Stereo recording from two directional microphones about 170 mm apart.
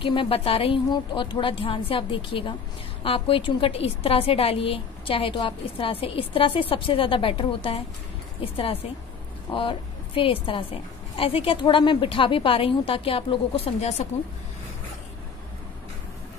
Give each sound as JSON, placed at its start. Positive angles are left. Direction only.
{"t": 0.0, "sound": "a woman's voice", "side_deg": 30}
{"t": 9.5, "sound": "a woman's voice", "side_deg": 30}